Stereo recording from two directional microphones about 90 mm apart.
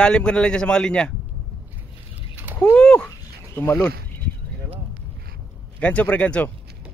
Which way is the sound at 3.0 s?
25° left (ahead or behind).